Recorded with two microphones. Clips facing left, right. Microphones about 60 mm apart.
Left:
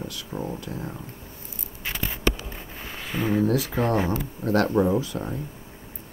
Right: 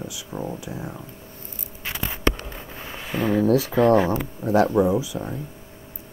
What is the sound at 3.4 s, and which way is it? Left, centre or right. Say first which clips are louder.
Speech: right 6 dB; right.